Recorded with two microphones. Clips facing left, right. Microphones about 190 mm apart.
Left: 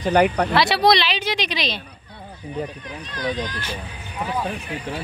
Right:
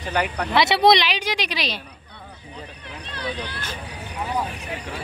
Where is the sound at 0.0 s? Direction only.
40° left (ahead or behind).